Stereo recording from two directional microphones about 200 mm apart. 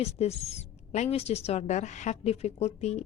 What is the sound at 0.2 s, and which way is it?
A woman's voice, 30° left (ahead or behind).